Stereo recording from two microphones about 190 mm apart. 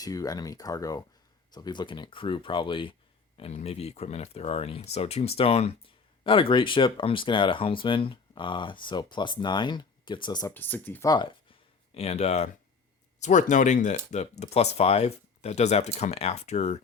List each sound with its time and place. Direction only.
0.0 s speech: 20° left (ahead or behind)
10.5 s speech: 10° left (ahead or behind)
11.1 s speech: 25° left (ahead or behind)